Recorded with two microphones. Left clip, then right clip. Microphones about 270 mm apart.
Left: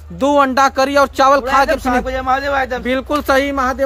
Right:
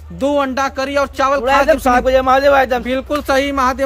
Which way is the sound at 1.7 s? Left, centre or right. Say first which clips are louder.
Right 5 dB; right.